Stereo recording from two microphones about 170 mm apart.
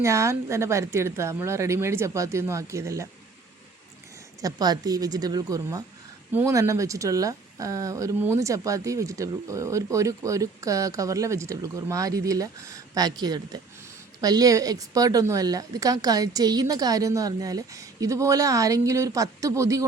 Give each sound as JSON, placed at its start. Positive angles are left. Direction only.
{"t": 0.0, "sound": "a woman's voice", "side_deg": -15}
{"t": 4.4, "sound": "speech", "side_deg": -20}